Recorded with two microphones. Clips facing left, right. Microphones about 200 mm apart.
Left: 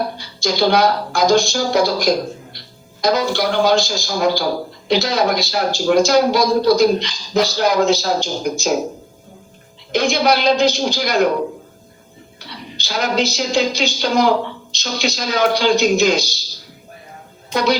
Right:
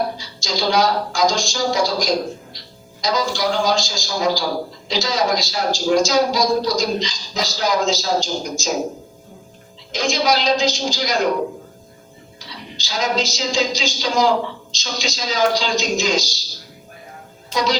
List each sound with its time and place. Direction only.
0.2 s a man's voice: 60° left (ahead or behind)
9.9 s a man's voice: 60° left (ahead or behind)
12.4 s a man's voice: 60° left (ahead or behind)
17.5 s speech: 60° left (ahead or behind)